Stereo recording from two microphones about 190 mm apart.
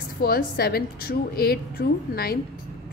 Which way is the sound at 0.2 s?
55° left (ahead or behind).